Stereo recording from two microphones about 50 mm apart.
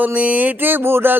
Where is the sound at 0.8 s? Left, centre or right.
Right.